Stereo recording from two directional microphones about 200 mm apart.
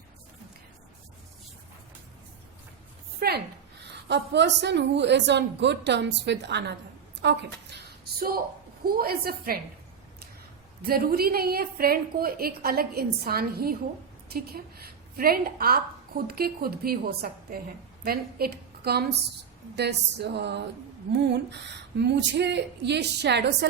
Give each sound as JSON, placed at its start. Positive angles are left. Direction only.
{"t": 3.2, "sound": "a sound", "side_deg": -50}
{"t": 4.1, "sound": "a woman's voice", "side_deg": -60}
{"t": 8.8, "sound": "a woman's voice", "side_deg": -50}
{"t": 10.8, "sound": "a woman's voice", "side_deg": -50}